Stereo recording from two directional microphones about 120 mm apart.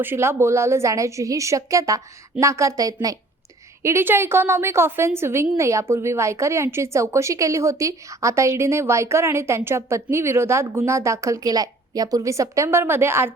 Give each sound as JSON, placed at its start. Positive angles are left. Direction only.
{"t": 0.0, "sound": "a woman's voice", "side_deg": -20}
{"t": 3.8, "sound": "a woman's voice", "side_deg": -20}